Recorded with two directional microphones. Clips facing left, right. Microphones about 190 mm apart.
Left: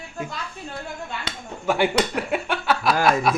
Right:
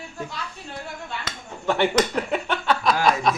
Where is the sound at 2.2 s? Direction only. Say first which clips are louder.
Even; 5° left (ahead or behind).